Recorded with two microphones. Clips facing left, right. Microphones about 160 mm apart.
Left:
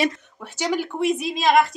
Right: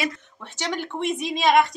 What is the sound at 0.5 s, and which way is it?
Speech, 10° left (ahead or behind).